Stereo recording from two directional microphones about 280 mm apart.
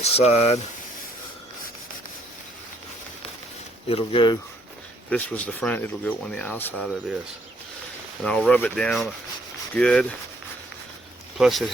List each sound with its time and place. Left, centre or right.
0.0 s speech: left
3.8 s speech: centre
5.0 s speech: centre
8.2 s speech: centre
11.3 s speech: centre